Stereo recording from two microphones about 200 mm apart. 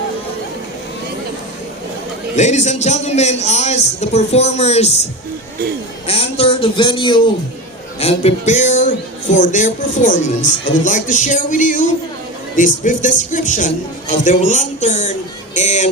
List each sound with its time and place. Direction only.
2.3 s speech: 35° left (ahead or behind)
6.1 s speech: 30° left (ahead or behind)